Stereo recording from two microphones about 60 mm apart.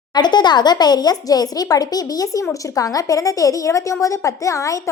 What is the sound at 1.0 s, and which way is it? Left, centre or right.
Speech, left.